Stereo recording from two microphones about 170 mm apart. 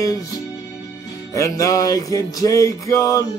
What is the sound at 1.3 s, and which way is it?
Music, 20° left (ahead or behind).